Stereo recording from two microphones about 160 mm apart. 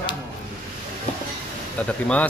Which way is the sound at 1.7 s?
10° left (ahead or behind).